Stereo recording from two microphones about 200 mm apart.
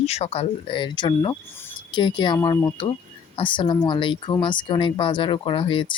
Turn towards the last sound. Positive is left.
turn(degrees=25)  # may be behind; listen again after turning